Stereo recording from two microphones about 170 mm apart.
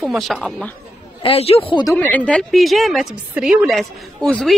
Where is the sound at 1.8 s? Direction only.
10° left (ahead or behind).